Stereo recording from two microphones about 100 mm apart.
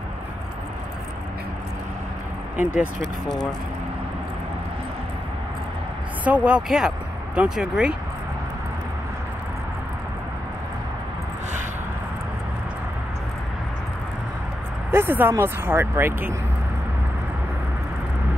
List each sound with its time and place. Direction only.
2.6 s speech: 15° right (ahead or behind)
6.2 s speech: 15° right (ahead or behind)
14.9 s speech: 20° right (ahead or behind)